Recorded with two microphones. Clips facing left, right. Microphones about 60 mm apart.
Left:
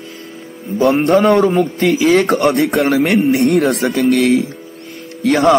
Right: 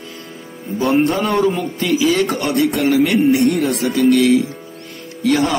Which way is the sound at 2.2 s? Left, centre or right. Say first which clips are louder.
Left 5 dB; left.